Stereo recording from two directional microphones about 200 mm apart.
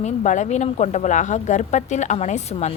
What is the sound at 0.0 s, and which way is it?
Speech, 35° left (ahead or behind).